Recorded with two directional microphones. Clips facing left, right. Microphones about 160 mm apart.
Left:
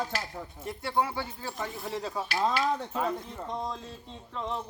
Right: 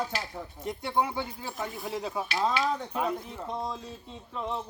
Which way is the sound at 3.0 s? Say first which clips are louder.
Even; 5° right (ahead or behind).